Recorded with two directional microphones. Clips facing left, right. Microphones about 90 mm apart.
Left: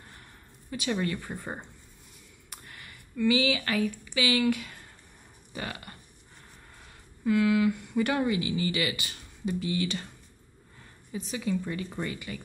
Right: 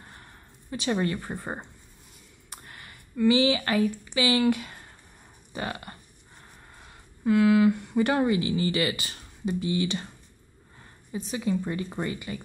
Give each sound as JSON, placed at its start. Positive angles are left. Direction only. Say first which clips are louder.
{"t": 0.7, "sound": "speech", "louder": "right 3 dB", "side_deg": -30}
{"t": 7.2, "sound": "speech", "louder": "right 4 dB", "side_deg": -35}
{"t": 11.3, "sound": "speech", "louder": "right 3 dB", "side_deg": -30}